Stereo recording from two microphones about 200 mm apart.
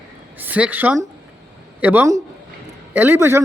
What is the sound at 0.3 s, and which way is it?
A woman's voice, 10° right (ahead or behind).